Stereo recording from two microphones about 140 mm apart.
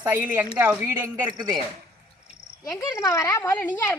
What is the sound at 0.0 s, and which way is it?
Speech, 15° right (ahead or behind).